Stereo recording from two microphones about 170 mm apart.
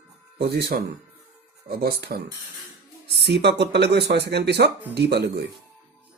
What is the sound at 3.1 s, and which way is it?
Speech, 80° right.